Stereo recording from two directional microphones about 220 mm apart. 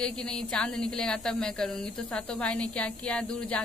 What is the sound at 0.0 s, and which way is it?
A woman's voice, 5° left (ahead or behind).